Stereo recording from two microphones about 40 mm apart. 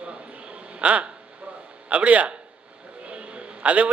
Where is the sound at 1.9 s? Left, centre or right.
Right.